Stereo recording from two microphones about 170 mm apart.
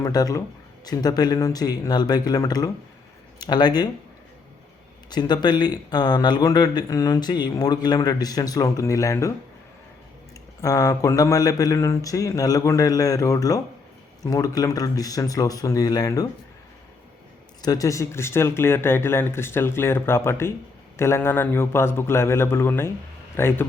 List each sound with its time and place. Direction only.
0.0 s speech: 20° left (ahead or behind)
5.0 s speech: 25° left (ahead or behind)
10.6 s speech: 20° left (ahead or behind)
17.6 s speech: 20° left (ahead or behind)